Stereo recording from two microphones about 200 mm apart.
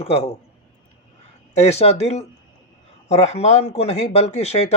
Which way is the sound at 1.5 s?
35° left (ahead or behind).